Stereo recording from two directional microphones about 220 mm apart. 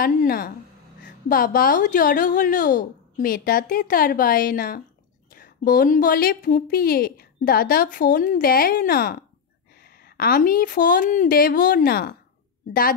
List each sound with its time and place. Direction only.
0.0 s a woman's voice: 40° left (ahead or behind)